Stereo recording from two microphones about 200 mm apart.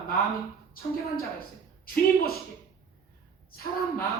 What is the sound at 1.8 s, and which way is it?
Speech, 45° left (ahead or behind).